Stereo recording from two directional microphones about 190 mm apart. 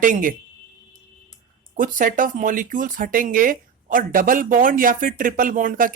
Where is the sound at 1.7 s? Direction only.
45° right (ahead or behind).